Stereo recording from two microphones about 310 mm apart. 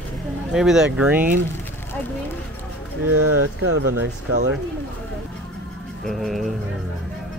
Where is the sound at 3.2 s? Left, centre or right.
Right.